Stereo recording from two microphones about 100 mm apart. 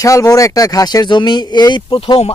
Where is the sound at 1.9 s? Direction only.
65° left (ahead or behind).